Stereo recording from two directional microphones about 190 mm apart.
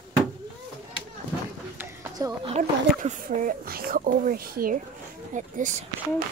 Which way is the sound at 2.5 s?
40° right (ahead or behind).